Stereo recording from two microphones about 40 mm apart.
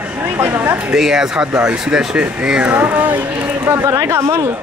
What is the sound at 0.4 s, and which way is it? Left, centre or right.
Speech, right.